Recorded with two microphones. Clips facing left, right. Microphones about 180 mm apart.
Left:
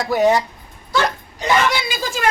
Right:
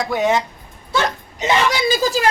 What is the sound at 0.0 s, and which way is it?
Speech, 5° left (ahead or behind).